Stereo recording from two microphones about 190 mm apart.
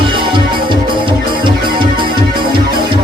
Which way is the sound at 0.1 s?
25° right (ahead or behind).